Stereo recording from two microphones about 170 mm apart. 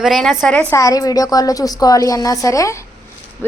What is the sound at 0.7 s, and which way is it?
A woman's voice, 20° left (ahead or behind).